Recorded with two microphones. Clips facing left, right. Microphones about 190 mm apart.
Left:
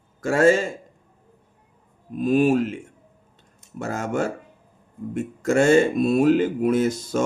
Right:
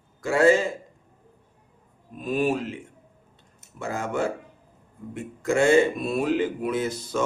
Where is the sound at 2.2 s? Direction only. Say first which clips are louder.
Left 6 dB; 45° left (ahead or behind).